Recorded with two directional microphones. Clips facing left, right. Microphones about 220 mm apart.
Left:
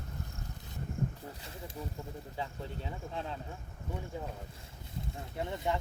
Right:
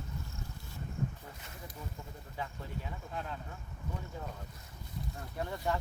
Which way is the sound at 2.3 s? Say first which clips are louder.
Even; 25° left (ahead or behind).